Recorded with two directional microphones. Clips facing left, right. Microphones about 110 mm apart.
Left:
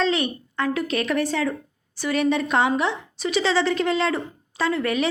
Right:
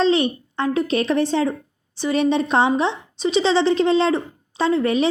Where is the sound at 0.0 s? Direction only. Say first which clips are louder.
Right 5 dB; 30° right (ahead or behind).